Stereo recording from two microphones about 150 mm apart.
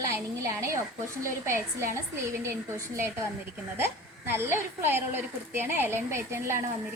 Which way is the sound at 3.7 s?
15° right (ahead or behind).